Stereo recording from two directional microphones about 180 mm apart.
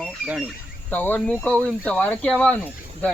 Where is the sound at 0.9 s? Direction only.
10° left (ahead or behind).